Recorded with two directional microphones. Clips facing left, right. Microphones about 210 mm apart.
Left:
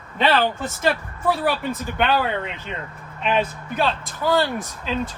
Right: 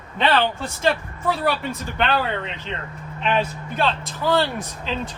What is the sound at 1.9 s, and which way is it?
Speech, 5° left (ahead or behind).